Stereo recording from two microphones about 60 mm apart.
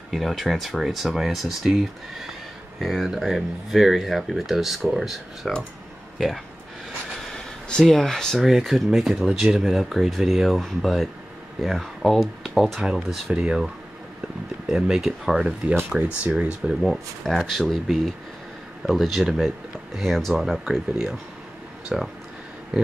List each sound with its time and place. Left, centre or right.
0.1 s speech: centre
7.2 s a sound: centre
7.8 s speech: centre
8.4 s speech: centre
14.7 s speech: centre
16.8 s speech: centre